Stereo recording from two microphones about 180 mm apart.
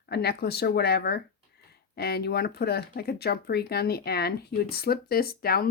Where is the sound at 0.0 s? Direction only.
65° left (ahead or behind).